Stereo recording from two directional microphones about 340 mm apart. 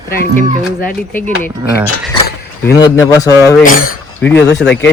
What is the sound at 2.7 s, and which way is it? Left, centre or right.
Speech, centre.